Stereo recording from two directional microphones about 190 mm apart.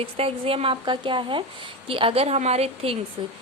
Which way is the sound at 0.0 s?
30° right (ahead or behind).